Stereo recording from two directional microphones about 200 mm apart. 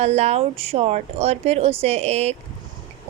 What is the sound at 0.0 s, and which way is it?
A woman's voice, 30° right (ahead or behind).